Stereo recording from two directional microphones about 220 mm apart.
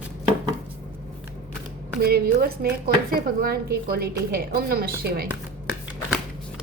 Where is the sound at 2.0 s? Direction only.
45° right (ahead or behind).